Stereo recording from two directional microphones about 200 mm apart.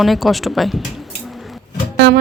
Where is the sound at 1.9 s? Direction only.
60° right (ahead or behind).